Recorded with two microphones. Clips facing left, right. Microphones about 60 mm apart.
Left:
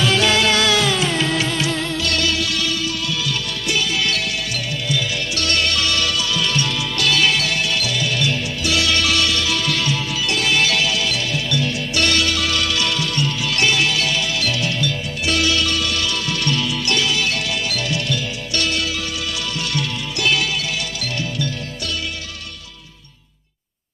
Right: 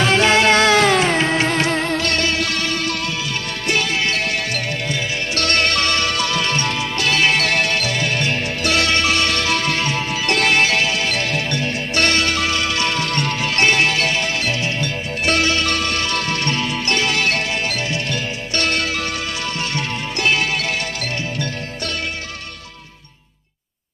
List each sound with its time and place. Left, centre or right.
0.0 s music: right